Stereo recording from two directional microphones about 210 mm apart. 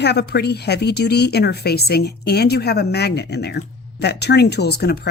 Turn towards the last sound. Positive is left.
turn(degrees=50)  # may be behind; listen again after turning